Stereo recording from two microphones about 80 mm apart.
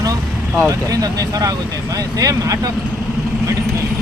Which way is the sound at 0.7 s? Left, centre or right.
Right.